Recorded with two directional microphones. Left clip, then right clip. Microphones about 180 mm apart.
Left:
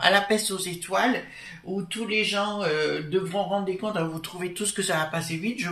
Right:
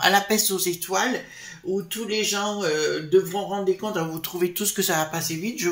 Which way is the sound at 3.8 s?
45° right (ahead or behind).